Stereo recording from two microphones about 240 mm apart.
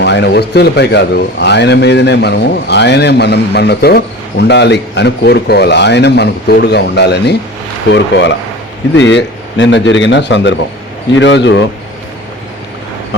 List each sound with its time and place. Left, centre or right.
0.0 s a man's voice: left